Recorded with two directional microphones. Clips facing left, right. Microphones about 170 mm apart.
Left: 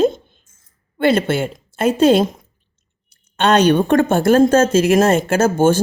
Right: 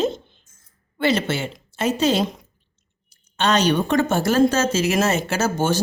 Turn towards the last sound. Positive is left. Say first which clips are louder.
# left 7 dB
turn(degrees=50)  # may be behind; listen again after turning